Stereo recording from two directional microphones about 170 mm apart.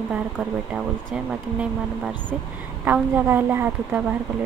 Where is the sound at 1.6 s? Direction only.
5° right (ahead or behind).